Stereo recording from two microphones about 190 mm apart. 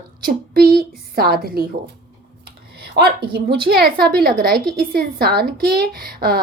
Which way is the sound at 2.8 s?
55° right (ahead or behind).